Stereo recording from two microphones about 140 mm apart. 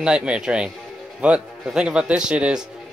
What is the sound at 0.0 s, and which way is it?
A man's voice, 5° right (ahead or behind).